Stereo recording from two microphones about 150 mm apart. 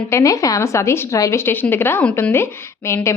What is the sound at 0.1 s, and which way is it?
A woman's voice, 20° left (ahead or behind).